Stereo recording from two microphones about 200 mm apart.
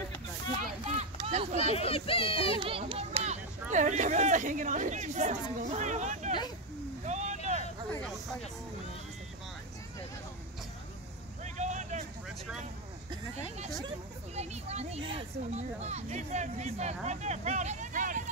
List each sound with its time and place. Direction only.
0.8 s a sound: 35° right (ahead or behind)
1.7 s speech: 30° left (ahead or behind)
2.6 s a child's voice: 25° right (ahead or behind)
7.1 s vehicle: 35° right (ahead or behind)
11.4 s vehicle: 35° right (ahead or behind)
13.8 s speech: 35° right (ahead or behind)